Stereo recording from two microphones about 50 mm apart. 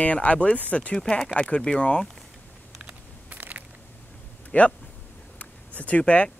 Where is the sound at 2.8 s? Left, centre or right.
Right.